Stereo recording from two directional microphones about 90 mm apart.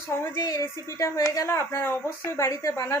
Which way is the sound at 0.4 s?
40° left (ahead or behind).